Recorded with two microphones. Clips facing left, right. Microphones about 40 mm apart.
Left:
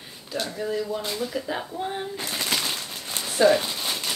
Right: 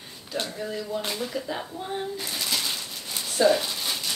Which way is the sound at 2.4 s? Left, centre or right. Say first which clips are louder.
Left 2 dB; left.